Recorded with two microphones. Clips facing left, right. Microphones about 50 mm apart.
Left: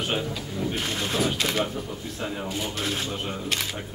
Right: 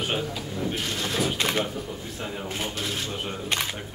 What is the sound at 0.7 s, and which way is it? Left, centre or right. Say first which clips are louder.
Vehicle: left 3 dB; centre.